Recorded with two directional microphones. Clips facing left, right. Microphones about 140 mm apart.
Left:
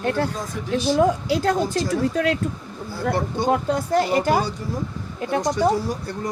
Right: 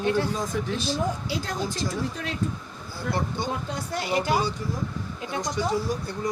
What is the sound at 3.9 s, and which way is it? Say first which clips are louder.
Speech: left 5 dB; 50° left (ahead or behind).